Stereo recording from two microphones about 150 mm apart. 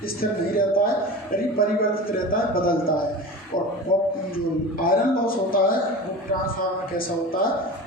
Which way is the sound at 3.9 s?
65° left (ahead or behind).